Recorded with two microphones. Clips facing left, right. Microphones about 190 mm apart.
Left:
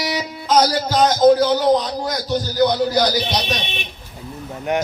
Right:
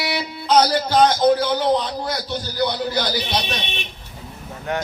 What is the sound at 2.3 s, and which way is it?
Speech, 40° left (ahead or behind).